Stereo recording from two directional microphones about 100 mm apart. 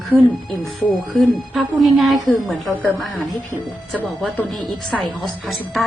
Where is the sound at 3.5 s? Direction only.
15° right (ahead or behind).